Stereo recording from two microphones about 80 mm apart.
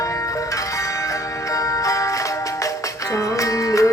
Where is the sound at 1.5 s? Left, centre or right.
Left.